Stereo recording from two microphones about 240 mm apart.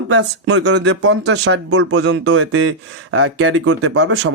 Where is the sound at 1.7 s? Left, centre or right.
Right.